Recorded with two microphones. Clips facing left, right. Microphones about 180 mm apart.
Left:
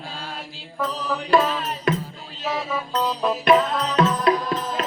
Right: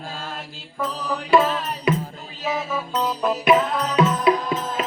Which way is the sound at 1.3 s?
5° right (ahead or behind).